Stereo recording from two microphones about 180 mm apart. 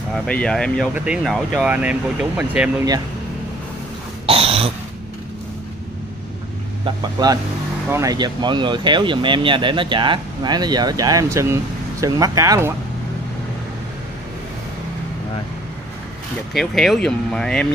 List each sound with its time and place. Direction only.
0.1 s speech: 5° left (ahead or behind)
4.3 s throat clearing: 30° right (ahead or behind)
6.8 s speech: 25° right (ahead or behind)
16.5 s speech: centre (ahead or behind)